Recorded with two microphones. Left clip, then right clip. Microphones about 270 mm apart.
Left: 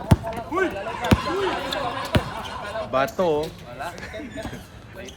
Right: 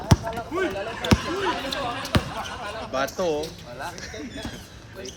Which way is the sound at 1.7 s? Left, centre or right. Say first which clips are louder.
Left 2 dB; centre.